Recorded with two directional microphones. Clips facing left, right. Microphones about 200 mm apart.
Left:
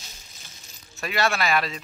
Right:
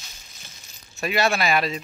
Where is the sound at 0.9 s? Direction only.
20° right (ahead or behind).